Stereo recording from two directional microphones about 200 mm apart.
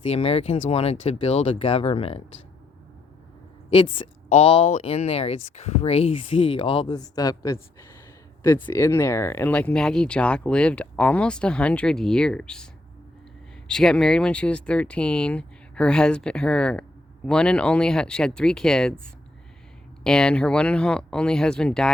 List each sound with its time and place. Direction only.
0.0 s speech: 30° left (ahead or behind)
3.7 s speech: 25° left (ahead or behind); by 12.6 s 5° left (ahead or behind)
13.7 s speech: 5° left (ahead or behind)
20.1 s speech: 5° left (ahead or behind)